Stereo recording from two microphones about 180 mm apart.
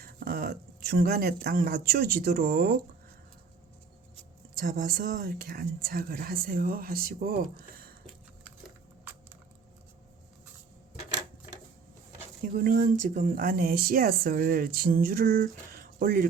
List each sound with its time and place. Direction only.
0.0 s speech: 55° right (ahead or behind)
4.5 s speech: 50° right (ahead or behind)
12.5 s speech: 50° right (ahead or behind)